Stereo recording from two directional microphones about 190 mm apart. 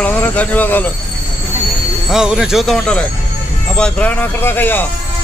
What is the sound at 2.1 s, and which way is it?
Speech, 5° right (ahead or behind).